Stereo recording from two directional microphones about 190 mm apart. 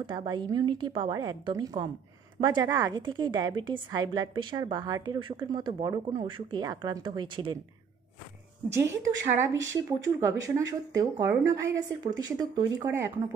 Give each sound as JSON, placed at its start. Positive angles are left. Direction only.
{"t": 0.0, "sound": "a woman's voice", "side_deg": -25}
{"t": 8.7, "sound": "speech", "side_deg": -15}